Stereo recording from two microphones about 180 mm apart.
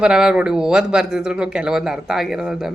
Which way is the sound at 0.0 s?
5° right (ahead or behind).